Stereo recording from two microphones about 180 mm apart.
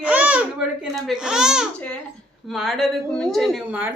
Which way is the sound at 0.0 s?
10° right (ahead or behind).